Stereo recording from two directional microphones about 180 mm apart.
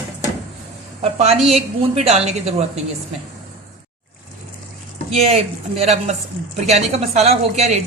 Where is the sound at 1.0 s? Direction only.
35° right (ahead or behind).